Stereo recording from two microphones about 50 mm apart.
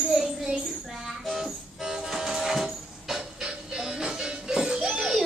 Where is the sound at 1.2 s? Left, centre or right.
Centre.